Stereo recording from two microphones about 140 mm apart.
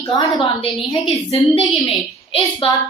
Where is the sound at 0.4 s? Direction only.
40° left (ahead or behind).